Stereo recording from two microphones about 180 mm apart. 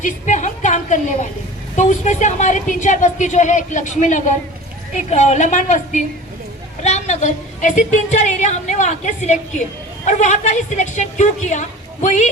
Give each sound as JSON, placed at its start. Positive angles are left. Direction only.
{"t": 0.0, "sound": "a woman's voice", "side_deg": 40}